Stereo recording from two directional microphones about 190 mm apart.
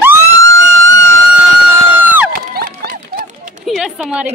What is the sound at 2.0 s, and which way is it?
Run, 10° right (ahead or behind).